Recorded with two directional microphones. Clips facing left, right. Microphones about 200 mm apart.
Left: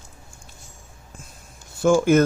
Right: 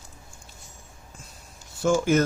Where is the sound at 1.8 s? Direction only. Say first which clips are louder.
Left 5 dB; 55° left (ahead or behind).